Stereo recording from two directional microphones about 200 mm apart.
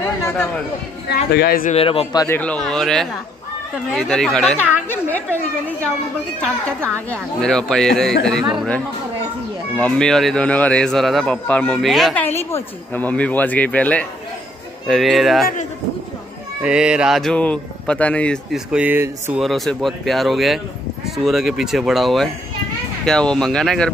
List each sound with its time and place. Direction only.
0.0 s chatter: 15° left (ahead or behind)
1.0 s speech: 55° left (ahead or behind)
1.7 s a man's voice: 30° left (ahead or behind)
2.1 s speech: 10° left (ahead or behind)
6.8 s speech: 5° left (ahead or behind)
16.6 s speech: 5° right (ahead or behind)
19.4 s speech: centre (ahead or behind)